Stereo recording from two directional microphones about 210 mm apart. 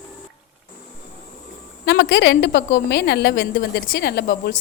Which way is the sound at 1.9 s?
55° left (ahead or behind).